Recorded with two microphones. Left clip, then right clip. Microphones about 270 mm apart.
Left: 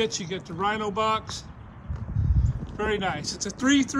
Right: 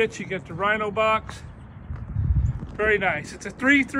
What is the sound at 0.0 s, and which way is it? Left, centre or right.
Speech, centre.